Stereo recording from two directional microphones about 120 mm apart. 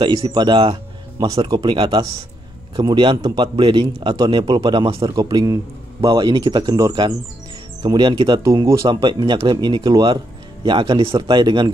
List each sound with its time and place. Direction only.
0.0 s a man's voice: 40° right (ahead or behind)
8.5 s a man's voice: 25° right (ahead or behind)